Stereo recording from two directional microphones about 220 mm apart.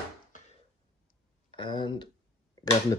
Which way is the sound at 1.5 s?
20° left (ahead or behind).